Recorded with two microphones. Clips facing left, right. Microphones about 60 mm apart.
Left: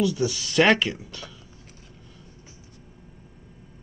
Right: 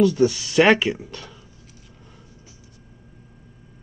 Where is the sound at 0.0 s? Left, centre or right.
Right.